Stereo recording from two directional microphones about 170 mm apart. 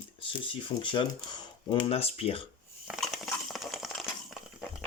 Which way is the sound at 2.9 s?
Centre (ahead or behind).